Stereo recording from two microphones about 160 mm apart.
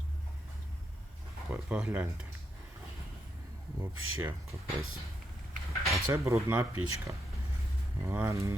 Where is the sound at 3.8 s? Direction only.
10° right (ahead or behind).